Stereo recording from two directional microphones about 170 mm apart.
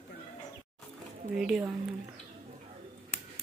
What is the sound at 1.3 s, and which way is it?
Speech, 5° right (ahead or behind).